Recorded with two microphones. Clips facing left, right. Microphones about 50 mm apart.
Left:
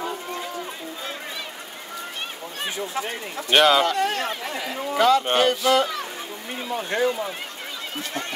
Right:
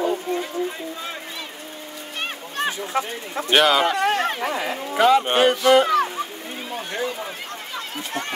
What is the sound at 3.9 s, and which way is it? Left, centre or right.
Speech, right.